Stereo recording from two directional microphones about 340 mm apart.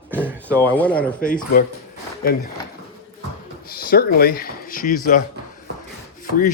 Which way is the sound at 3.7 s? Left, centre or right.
Left.